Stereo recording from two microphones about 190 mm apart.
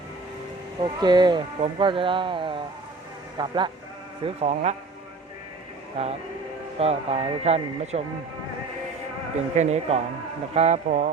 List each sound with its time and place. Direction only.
0.8 s speech: 20° right (ahead or behind)
4.4 s speech: 35° right (ahead or behind)
6.0 s speech: 35° right (ahead or behind)
9.6 s speech: 35° right (ahead or behind)